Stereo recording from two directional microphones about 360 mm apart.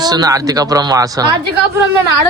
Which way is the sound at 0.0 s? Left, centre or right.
Centre.